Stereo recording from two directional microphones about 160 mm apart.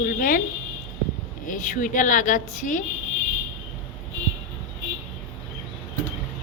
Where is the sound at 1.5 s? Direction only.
55° left (ahead or behind).